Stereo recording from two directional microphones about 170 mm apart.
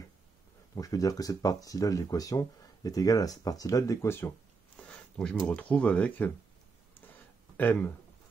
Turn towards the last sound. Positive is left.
turn(degrees=10)  # may be behind; listen again after turning